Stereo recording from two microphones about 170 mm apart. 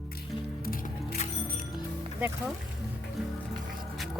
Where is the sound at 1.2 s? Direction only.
40° left (ahead or behind).